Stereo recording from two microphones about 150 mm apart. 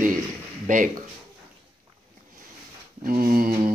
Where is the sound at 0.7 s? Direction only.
60° right (ahead or behind).